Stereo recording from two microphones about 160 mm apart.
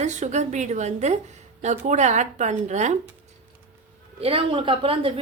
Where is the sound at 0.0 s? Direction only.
45° right (ahead or behind).